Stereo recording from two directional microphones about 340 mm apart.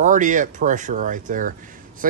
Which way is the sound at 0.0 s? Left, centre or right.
Right.